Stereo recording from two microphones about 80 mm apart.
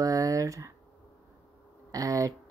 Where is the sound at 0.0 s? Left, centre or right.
Right.